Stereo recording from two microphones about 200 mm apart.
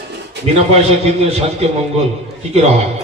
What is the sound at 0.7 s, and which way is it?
Speech, 30° right (ahead or behind).